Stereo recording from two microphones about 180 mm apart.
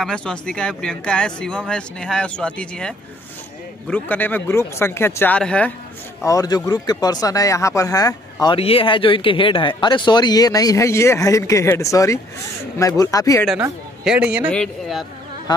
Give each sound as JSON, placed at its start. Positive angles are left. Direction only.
{"t": 0.0, "sound": "speech", "side_deg": 5}
{"t": 6.2, "sound": "speech", "side_deg": 20}
{"t": 8.5, "sound": "speech", "side_deg": 30}
{"t": 13.6, "sound": "speech", "side_deg": -5}